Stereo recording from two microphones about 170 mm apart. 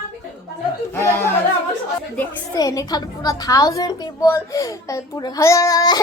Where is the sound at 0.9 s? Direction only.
15° left (ahead or behind).